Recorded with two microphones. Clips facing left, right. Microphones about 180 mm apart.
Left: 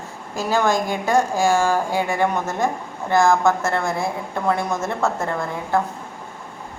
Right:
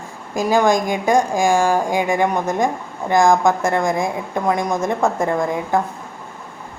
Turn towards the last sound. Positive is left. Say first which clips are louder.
# right 4 dB
turn(degrees=-15)  # may be behind; listen again after turning